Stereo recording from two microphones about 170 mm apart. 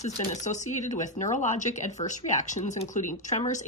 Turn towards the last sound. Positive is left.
turn(degrees=45)  # may be behind; listen again after turning